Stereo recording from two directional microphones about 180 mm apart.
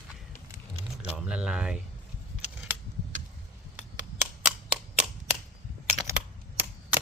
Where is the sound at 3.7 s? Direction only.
10° right (ahead or behind).